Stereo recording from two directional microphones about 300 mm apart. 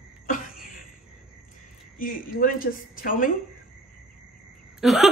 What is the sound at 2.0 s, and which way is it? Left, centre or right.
A woman's voice, left.